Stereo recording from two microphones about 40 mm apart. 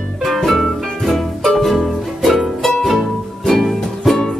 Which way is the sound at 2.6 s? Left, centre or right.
Centre.